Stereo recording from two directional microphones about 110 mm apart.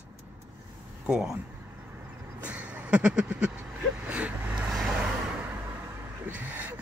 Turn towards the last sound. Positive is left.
turn(degrees=-15)  # may be behind; listen again after turning